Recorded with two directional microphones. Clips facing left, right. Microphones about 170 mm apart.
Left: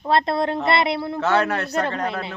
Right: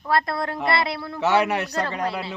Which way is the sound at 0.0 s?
25° left (ahead or behind).